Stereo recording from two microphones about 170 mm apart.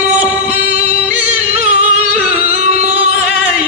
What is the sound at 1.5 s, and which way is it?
Music, 40° right (ahead or behind).